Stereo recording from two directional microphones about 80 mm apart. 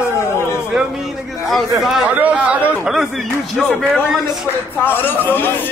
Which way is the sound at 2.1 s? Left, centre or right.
Centre.